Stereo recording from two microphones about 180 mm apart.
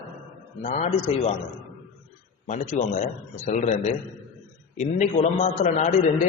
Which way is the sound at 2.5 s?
45° left (ahead or behind).